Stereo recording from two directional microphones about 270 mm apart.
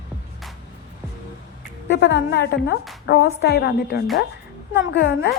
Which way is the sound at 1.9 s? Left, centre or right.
Left.